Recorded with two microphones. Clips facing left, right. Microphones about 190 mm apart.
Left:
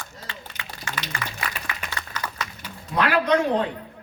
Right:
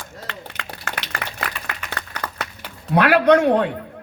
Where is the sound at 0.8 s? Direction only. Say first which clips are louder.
Right 1 dB; 60° right (ahead or behind).